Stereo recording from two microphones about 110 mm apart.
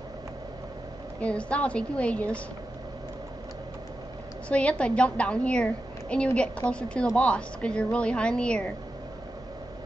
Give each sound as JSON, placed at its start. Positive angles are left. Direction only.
{"t": 1.2, "sound": "a woman's voice", "side_deg": 10}
{"t": 4.5, "sound": "a woman's voice", "side_deg": 10}